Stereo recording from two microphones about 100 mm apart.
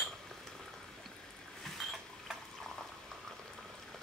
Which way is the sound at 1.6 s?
5° left (ahead or behind).